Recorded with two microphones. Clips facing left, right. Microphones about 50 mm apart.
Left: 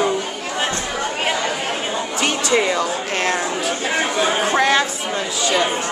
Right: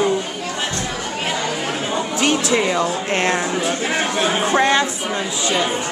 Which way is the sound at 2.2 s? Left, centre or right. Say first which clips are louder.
Even; centre.